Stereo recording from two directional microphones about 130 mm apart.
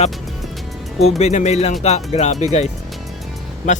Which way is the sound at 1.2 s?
60° left (ahead or behind).